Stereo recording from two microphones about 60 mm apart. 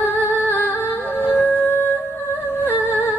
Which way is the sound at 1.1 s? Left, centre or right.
Left.